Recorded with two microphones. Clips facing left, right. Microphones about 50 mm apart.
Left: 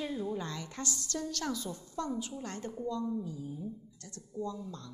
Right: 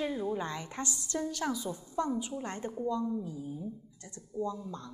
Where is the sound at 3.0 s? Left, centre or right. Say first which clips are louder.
Right 1 dB; centre.